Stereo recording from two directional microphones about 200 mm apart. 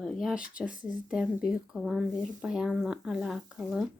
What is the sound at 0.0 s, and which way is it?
A woman's voice, centre (ahead or behind).